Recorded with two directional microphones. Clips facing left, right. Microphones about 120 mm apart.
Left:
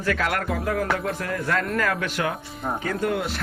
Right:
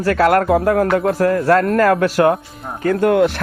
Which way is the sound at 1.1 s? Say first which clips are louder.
Right 12 dB; 40° right (ahead or behind).